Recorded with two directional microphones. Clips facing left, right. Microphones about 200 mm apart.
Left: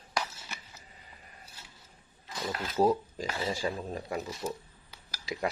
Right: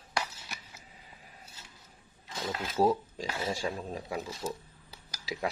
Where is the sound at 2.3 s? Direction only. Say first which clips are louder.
Even; 25° right (ahead or behind).